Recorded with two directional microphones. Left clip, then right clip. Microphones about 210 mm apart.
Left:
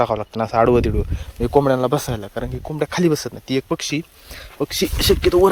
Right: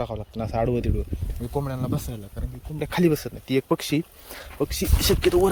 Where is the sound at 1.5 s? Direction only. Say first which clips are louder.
Left 14 dB; 35° left (ahead or behind).